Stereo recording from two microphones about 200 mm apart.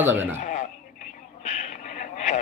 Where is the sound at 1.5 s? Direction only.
35° left (ahead or behind).